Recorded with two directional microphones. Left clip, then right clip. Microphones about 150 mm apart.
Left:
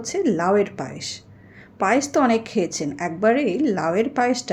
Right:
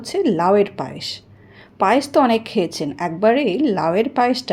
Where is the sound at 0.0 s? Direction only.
25° right (ahead or behind).